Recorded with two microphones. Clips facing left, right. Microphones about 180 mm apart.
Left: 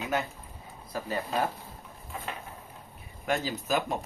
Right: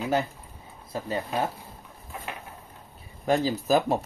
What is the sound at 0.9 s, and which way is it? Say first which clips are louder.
Speech: right 2 dB; 25° right (ahead or behind).